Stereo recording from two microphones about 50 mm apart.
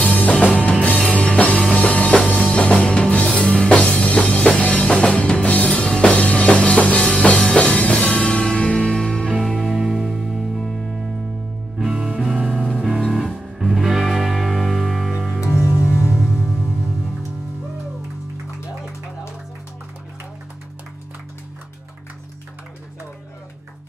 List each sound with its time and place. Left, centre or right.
0.0 s music: left
9.3 s music: centre
11.8 s music: centre
15.4 s music: left